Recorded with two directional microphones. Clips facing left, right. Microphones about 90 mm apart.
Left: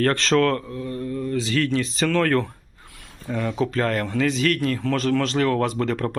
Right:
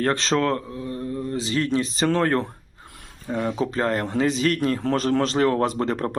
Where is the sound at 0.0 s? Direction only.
20° right (ahead or behind).